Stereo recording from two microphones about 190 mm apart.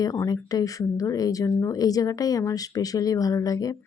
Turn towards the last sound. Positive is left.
turn(degrees=20)  # may be behind; listen again after turning